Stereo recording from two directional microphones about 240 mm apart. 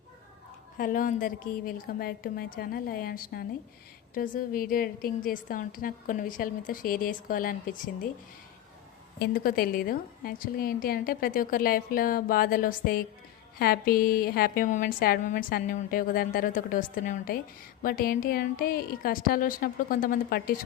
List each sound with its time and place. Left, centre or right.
0.8 s a woman's voice: left
9.1 s a woman's voice: left